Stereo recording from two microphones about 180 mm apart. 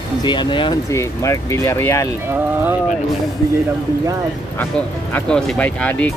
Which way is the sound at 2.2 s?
10° right (ahead or behind).